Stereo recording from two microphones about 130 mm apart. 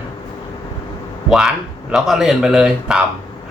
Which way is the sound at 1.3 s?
5° right (ahead or behind).